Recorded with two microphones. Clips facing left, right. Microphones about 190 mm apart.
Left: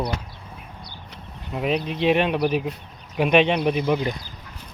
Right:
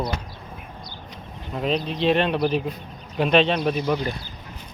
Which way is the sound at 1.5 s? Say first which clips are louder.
Even; 10° left (ahead or behind).